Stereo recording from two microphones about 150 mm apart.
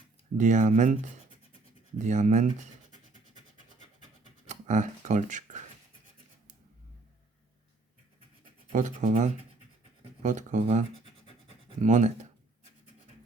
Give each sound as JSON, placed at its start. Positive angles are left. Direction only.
{"t": 0.3, "sound": "speech", "side_deg": -55}
{"t": 2.0, "sound": "speech", "side_deg": -55}
{"t": 4.4, "sound": "speech", "side_deg": -55}
{"t": 8.7, "sound": "speech", "side_deg": -55}